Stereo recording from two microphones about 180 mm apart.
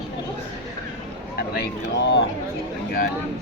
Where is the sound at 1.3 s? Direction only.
60° left (ahead or behind).